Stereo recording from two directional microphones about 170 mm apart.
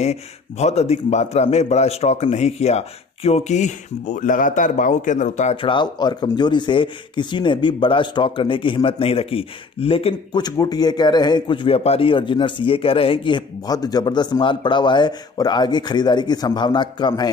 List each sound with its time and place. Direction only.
0.0 s a man's voice: 40° left (ahead or behind)
5.6 s speech: 30° left (ahead or behind)